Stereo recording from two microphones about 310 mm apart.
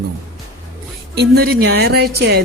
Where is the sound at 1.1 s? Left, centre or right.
Right.